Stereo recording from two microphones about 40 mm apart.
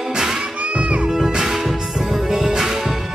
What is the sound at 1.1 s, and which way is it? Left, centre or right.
Music, centre.